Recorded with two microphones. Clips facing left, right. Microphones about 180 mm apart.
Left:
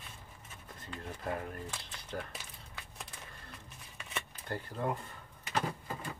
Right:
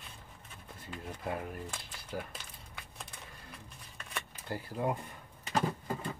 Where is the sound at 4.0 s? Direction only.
5° left (ahead or behind).